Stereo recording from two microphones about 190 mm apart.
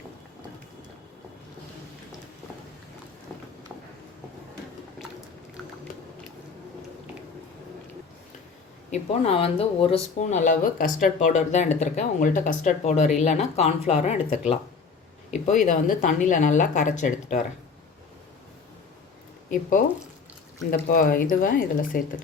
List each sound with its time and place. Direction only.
8.9 s speech: 30° left (ahead or behind)
20.7 s speech: 50° left (ahead or behind)